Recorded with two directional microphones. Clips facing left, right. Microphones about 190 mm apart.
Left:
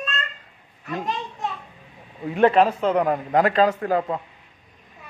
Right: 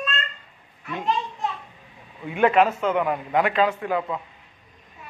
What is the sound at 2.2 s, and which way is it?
A man's voice, 35° left (ahead or behind).